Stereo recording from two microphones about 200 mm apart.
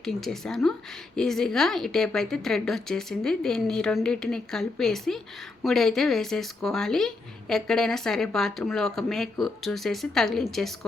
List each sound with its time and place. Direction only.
0.0 s speech: centre (ahead or behind)